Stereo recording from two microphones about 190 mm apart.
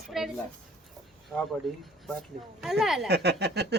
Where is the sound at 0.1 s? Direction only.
Centre (ahead or behind).